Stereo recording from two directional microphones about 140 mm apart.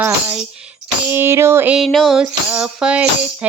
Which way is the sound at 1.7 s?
Centre (ahead or behind).